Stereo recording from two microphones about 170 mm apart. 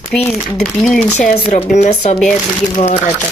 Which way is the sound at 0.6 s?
Centre (ahead or behind).